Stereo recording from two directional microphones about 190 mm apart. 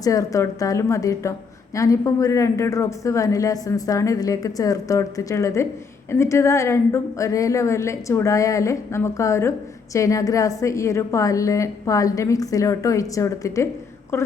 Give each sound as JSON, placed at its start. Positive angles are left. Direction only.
{"t": 0.0, "sound": "speech", "side_deg": 20}